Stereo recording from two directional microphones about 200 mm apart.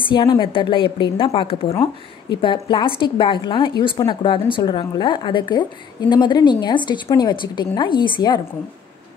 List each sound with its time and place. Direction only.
0.0 s a woman's voice: 25° left (ahead or behind)